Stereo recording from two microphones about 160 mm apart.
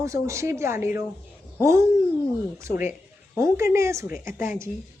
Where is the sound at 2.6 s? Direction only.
15° right (ahead or behind).